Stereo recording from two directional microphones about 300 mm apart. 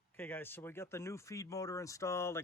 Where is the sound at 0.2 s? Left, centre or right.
Centre.